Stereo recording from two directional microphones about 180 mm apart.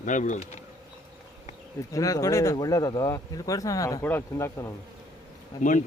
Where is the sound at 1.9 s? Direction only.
20° left (ahead or behind).